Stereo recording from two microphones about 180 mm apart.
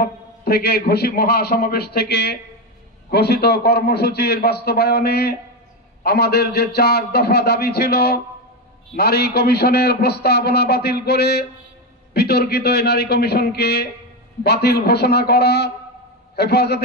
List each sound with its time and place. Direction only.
0.0 s a man's voice: 60° left (ahead or behind)